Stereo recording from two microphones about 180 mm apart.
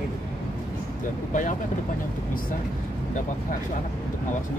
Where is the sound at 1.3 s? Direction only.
45° left (ahead or behind).